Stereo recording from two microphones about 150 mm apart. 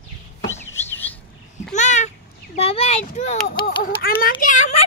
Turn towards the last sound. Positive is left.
turn(degrees=55)  # may be behind; listen again after turning